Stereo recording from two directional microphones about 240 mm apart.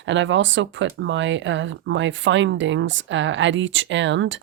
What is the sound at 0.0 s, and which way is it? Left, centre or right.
Speech, right.